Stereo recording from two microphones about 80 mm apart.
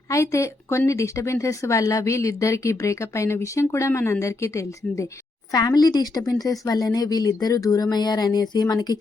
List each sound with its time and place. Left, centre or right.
0.1 s speech: left
5.5 s speech: left